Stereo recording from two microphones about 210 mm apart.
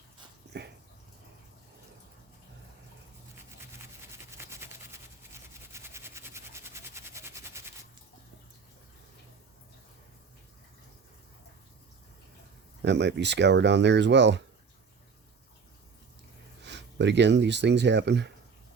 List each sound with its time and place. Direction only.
4.0 s a sound: 10° right (ahead or behind)
12.8 s speech: 55° right (ahead or behind)
16.6 s speech: 55° right (ahead or behind)